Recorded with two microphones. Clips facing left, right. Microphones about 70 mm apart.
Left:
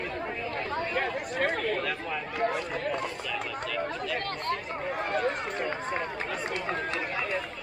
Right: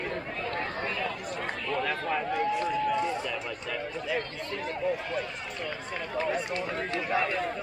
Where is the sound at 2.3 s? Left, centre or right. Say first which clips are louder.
Left 2 dB; left.